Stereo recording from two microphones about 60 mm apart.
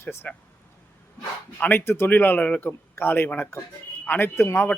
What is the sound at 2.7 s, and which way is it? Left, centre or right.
A man's voice, left.